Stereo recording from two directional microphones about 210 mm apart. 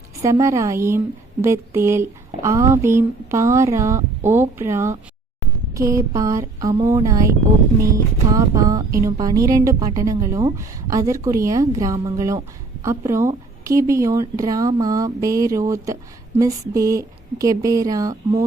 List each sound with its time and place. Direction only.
0.2 s a woman's voice: 15° right (ahead or behind)
8.3 s a woman's voice: 15° right (ahead or behind)